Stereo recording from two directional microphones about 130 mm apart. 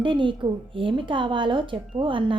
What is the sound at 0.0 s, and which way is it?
A woman's voice, 40° right (ahead or behind).